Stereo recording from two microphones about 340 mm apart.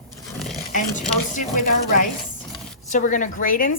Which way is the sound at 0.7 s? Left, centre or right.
Left.